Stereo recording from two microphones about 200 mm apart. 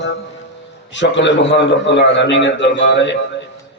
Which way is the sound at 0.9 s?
65° left (ahead or behind).